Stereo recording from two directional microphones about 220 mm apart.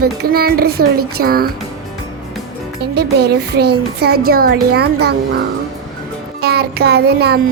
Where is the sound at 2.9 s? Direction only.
50° right (ahead or behind).